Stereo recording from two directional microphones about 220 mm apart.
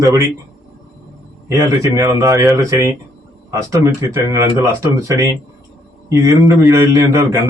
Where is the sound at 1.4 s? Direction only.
15° right (ahead or behind).